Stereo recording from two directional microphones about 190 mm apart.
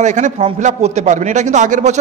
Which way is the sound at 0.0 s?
40° right (ahead or behind).